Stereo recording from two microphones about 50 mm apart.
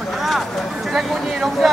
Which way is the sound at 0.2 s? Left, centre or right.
Centre.